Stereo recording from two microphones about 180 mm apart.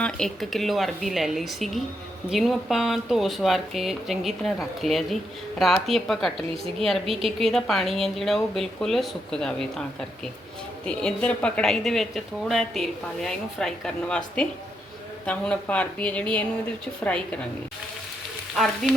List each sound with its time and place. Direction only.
0.0 s a woman's voice: 5° left (ahead or behind)
10.8 s a woman's voice: 5° left (ahead or behind)
18.5 s a woman's voice: centre (ahead or behind)